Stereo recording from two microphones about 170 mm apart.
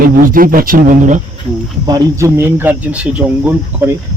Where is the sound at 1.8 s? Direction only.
20° right (ahead or behind).